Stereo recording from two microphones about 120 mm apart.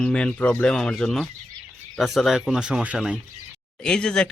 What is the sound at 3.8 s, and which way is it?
Speech, 5° left (ahead or behind).